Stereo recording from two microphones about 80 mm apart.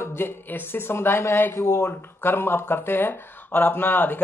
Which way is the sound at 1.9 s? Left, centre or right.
Left.